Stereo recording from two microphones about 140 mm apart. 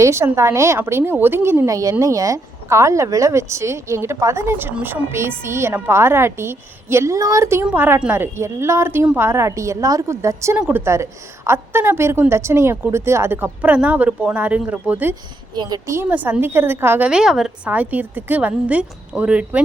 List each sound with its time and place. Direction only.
0.0 s a woman's voice: 20° right (ahead or behind)
15.5 s a woman's voice: 30° right (ahead or behind)
17.1 s a woman's voice: 5° right (ahead or behind)